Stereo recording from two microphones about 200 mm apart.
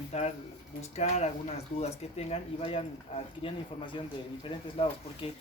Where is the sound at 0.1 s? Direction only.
35° left (ahead or behind).